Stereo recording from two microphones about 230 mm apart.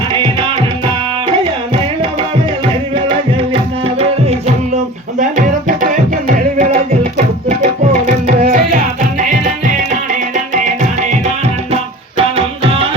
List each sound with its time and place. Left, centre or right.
3.8 s music: right
7.4 s tabla: right